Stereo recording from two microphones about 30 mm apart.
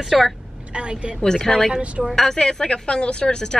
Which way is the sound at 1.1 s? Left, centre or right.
Centre.